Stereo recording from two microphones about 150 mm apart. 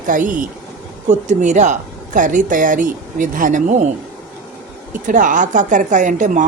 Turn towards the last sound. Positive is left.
turn(degrees=-55)  # may be behind; listen again after turning